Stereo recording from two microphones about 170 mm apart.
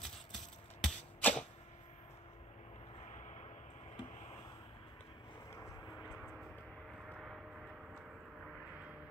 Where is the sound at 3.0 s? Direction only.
45° left (ahead or behind).